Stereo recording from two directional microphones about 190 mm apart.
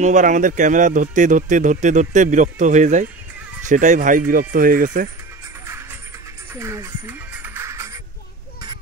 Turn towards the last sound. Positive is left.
turn(degrees=-15)  # may be behind; listen again after turning